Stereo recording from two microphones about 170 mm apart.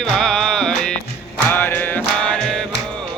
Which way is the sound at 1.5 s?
10° left (ahead or behind).